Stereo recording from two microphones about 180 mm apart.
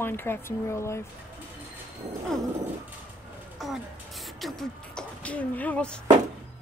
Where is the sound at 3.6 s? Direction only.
Centre (ahead or behind).